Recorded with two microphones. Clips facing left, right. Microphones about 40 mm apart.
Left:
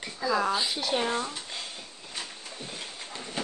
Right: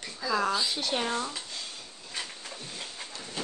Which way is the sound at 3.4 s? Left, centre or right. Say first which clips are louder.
Left 2 dB; left.